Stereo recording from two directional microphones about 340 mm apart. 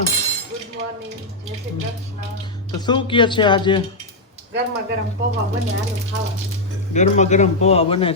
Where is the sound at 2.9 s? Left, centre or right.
Centre.